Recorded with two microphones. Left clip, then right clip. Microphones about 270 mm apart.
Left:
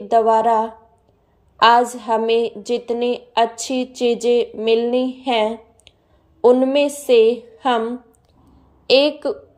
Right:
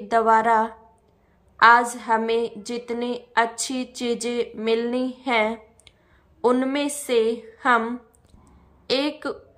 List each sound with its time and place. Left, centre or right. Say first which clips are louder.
0.3 s a woman's voice: left 3 dB; centre
8.8 s a woman's voice: left 9 dB; centre